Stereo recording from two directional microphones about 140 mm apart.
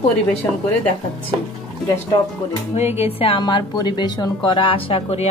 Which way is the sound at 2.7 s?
50° left (ahead or behind).